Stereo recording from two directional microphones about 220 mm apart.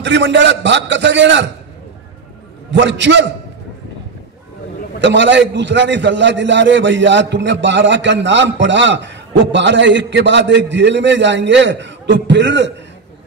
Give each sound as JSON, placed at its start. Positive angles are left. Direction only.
{"t": 0.0, "sound": "a man's voice", "side_deg": -55}
{"t": 2.7, "sound": "a man's voice", "side_deg": -55}
{"t": 5.0, "sound": "a man's voice", "side_deg": -55}